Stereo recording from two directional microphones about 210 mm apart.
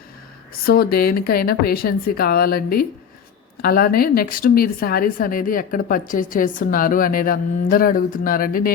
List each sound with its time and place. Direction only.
0.6 s a woman's voice: 45° left (ahead or behind)